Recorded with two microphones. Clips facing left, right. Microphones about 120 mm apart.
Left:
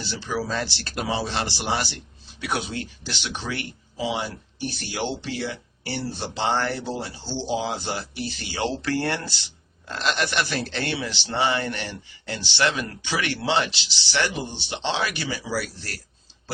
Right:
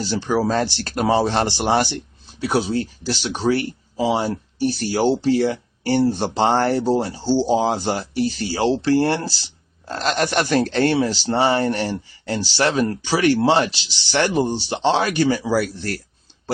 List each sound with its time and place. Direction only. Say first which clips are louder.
0.0 s speech: right 8 dB; 45° right (ahead or behind)
2.4 s speech: right 8 dB; 35° right (ahead or behind); by 16.0 s 55° right (ahead or behind)